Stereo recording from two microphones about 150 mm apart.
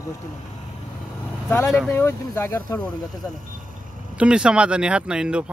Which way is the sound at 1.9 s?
15° left (ahead or behind).